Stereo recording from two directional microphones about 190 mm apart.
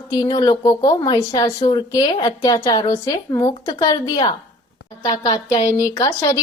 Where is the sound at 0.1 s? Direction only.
20° left (ahead or behind).